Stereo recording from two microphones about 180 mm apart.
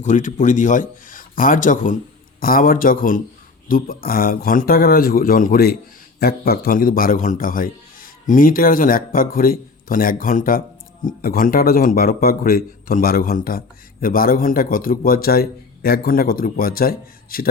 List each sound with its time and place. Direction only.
0.0 s a man's voice: 45° left (ahead or behind)